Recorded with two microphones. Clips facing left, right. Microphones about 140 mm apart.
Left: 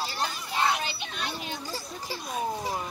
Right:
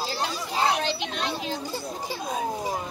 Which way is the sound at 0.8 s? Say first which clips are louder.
Right 6 dB; 90° right.